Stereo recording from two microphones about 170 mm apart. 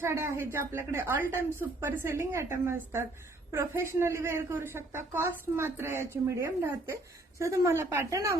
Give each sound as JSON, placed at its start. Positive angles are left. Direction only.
{"t": 0.0, "sound": "a woman's voice", "side_deg": -15}